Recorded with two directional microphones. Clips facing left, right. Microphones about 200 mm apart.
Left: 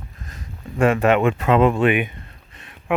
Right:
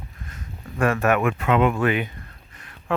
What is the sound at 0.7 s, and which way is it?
Speech, 20° left (ahead or behind).